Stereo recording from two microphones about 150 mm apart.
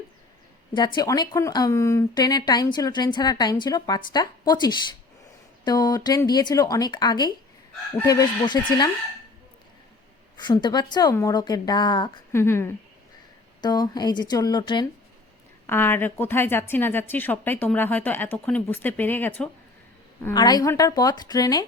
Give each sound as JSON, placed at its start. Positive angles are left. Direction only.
{"t": 0.9, "sound": "speech", "side_deg": 25}
{"t": 10.3, "sound": "speech", "side_deg": 30}
{"t": 12.3, "sound": "speech", "side_deg": 15}
{"t": 13.6, "sound": "speech", "side_deg": 25}
{"t": 15.6, "sound": "speech", "side_deg": 15}
{"t": 20.3, "sound": "speech", "side_deg": 25}